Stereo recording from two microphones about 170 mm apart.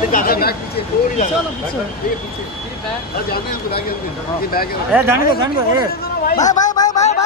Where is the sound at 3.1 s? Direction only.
60° left (ahead or behind).